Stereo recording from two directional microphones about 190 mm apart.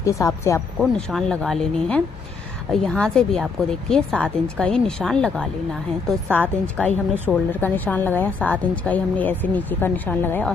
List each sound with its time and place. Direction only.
0.0 s a woman's voice: 15° left (ahead or behind)
0.7 s a woman's voice: 5° left (ahead or behind)
6.8 s a woman's voice: 5° left (ahead or behind)
7.6 s a woman's voice: 10° left (ahead or behind)